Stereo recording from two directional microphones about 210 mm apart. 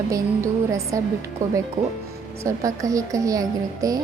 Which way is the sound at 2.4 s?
15° right (ahead or behind).